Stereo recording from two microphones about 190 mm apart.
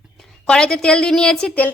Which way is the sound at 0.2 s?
5° left (ahead or behind).